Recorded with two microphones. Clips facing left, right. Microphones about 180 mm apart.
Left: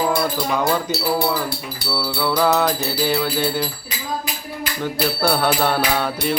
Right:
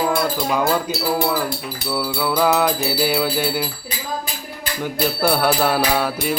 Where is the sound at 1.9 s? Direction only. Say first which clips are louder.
Even; 10° right (ahead or behind).